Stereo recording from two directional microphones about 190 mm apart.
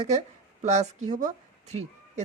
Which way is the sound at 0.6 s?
35° right (ahead or behind).